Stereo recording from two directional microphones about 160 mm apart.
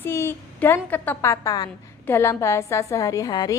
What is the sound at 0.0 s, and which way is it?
A woman's voice, 15° left (ahead or behind).